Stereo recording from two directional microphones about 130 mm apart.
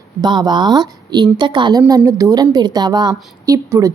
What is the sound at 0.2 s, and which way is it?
A woman's voice, 30° right (ahead or behind).